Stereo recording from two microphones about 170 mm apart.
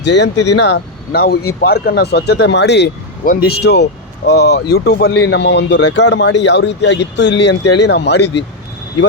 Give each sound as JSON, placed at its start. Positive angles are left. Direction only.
{"t": 0.0, "sound": "speech", "side_deg": 90}
{"t": 3.2, "sound": "speech", "side_deg": 70}